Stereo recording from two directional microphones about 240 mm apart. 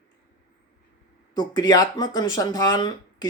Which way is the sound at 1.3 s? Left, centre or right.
Centre.